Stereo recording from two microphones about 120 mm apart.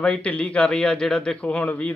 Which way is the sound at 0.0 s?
10° left (ahead or behind).